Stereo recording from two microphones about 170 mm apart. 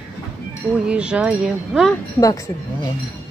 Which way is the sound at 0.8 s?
5° right (ahead or behind).